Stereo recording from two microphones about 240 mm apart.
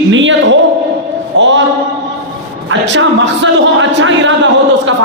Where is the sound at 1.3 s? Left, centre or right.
Right.